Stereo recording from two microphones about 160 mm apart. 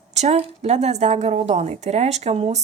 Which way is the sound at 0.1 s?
45° right (ahead or behind).